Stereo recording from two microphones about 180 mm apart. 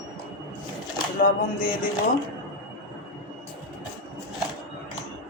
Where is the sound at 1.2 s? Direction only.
50° left (ahead or behind).